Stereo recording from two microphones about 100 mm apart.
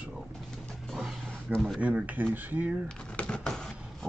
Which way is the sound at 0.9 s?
Centre (ahead or behind).